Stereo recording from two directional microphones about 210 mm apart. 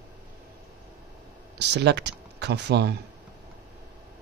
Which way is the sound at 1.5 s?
55° right (ahead or behind).